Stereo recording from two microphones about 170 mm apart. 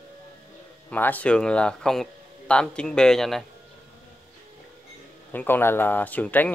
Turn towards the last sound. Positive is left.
turn(degrees=10)  # may be behind; listen again after turning